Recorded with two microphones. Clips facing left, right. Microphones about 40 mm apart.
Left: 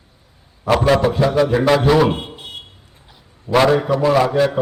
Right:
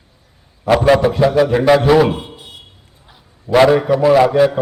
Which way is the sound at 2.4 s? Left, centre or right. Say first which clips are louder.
Left 4 dB; left.